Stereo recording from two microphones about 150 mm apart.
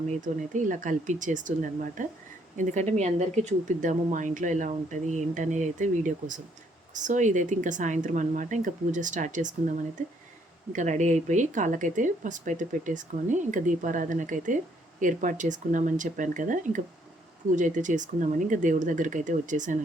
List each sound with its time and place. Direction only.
0.2 s speech: 60° right (ahead or behind)